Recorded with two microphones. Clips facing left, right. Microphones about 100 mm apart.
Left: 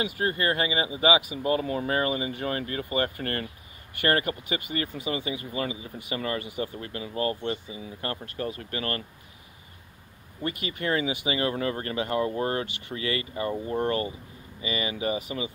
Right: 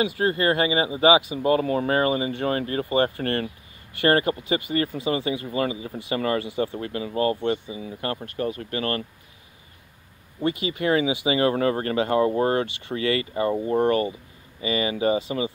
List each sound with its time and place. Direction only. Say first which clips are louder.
0.0 s speech: right 5 dB; 30° right (ahead or behind)
10.4 s speech: right 6 dB; 25° right (ahead or behind)
11.2 s speech: right 6 dB; 30° right (ahead or behind)